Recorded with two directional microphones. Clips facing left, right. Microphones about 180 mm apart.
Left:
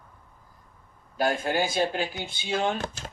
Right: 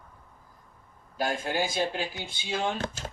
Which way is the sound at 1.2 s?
55° left (ahead or behind).